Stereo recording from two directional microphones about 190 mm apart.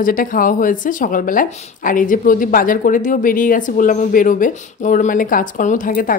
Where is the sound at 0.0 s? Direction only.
45° left (ahead or behind).